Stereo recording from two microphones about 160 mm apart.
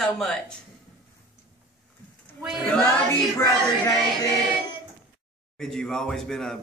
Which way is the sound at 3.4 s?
20° left (ahead or behind).